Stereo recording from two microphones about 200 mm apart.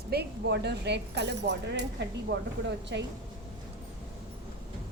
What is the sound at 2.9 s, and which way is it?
Speech, 60° right (ahead or behind).